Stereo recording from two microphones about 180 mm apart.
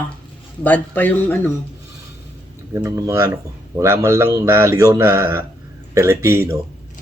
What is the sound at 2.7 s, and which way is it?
A man's voice, 15° right (ahead or behind).